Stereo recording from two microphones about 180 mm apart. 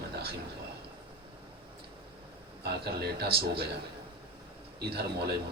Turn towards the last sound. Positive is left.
turn(degrees=-65)  # may be behind; listen again after turning